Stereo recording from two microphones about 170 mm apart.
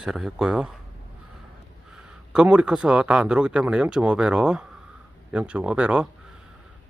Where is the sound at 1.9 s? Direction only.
5° right (ahead or behind).